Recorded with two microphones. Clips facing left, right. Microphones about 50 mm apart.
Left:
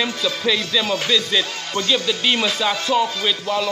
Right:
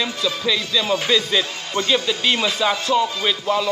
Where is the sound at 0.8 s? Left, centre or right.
Centre.